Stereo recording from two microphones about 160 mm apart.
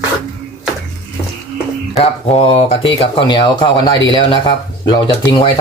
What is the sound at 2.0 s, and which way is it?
Speech, 40° left (ahead or behind).